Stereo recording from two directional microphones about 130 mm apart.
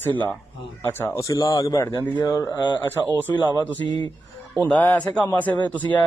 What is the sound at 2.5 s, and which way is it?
Speech, 35° left (ahead or behind).